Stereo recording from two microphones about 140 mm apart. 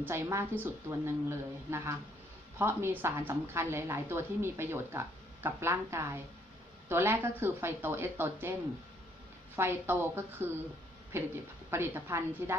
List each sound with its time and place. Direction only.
0.0 s a woman's voice: 20° right (ahead or behind)
9.6 s a woman's voice: 15° right (ahead or behind)